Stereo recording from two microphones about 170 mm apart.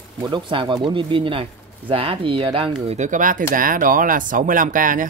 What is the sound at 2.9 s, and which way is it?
Speech, 45° right (ahead or behind).